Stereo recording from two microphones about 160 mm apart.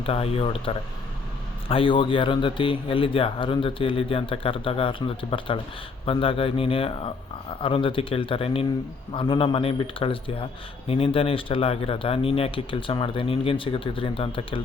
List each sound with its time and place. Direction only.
0.0 s a man's voice: 40° left (ahead or behind)
1.6 s a man's voice: 35° left (ahead or behind)